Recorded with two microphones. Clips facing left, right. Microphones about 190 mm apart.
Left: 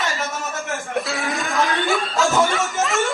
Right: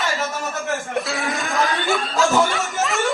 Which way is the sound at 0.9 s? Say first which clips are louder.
Even; centre (ahead or behind).